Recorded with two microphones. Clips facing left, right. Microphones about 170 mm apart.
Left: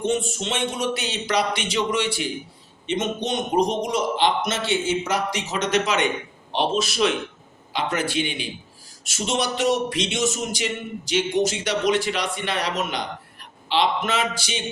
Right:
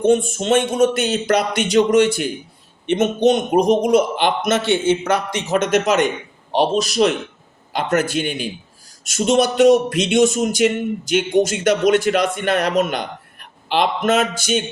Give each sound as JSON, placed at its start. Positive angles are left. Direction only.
{"t": 0.0, "sound": "speech", "side_deg": -50}
{"t": 2.8, "sound": "a man's voice", "side_deg": -55}